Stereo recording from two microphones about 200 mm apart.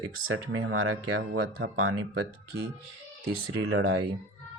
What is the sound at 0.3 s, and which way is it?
Speech, 90° right.